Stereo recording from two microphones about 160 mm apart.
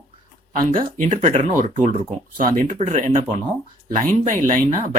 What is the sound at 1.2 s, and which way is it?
Speech, 40° right (ahead or behind).